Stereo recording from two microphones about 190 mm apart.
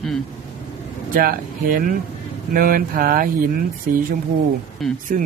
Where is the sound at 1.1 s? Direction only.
50° right (ahead or behind).